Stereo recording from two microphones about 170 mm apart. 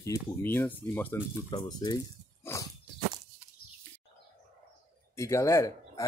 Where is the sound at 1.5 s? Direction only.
25° left (ahead or behind).